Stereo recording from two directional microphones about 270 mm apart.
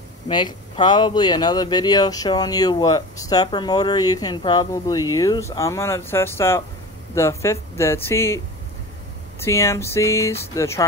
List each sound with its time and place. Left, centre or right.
0.3 s speech: centre
9.4 s speech: centre